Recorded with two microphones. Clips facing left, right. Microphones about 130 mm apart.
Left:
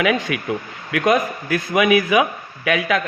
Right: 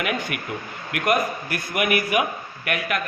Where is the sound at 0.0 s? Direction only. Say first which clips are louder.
Left 7 dB; 90° left.